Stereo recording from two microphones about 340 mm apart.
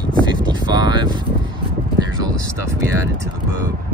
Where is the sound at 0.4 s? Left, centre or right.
Centre.